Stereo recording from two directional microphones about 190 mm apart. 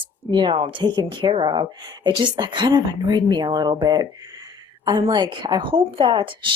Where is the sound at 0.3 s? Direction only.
25° right (ahead or behind).